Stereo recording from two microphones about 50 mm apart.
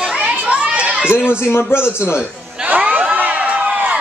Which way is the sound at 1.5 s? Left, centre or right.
Left.